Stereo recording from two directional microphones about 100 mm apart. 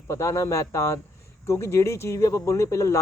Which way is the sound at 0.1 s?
25° left (ahead or behind).